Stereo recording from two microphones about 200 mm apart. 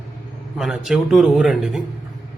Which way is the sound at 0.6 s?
Centre (ahead or behind).